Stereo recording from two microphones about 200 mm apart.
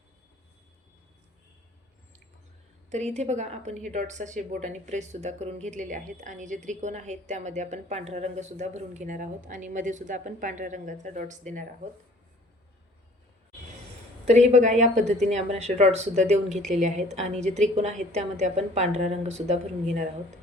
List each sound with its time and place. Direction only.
2.9 s a woman's voice: 35° right (ahead or behind)
14.3 s a woman's voice: 35° right (ahead or behind)